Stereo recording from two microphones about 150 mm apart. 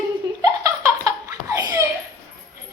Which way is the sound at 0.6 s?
20° right (ahead or behind).